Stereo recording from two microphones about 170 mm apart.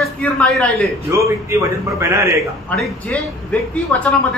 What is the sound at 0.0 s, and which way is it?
Speech, 5° left (ahead or behind).